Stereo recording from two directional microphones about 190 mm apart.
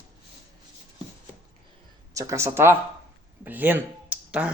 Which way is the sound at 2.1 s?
15° right (ahead or behind).